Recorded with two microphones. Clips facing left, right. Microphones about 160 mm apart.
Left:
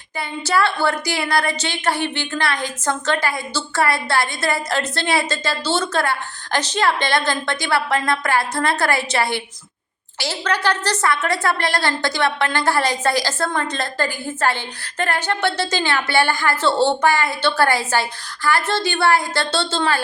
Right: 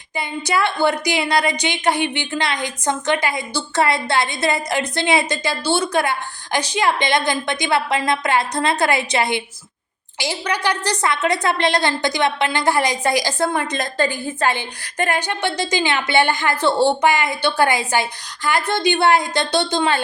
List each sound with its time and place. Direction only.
0.2 s a woman's voice: 15° right (ahead or behind)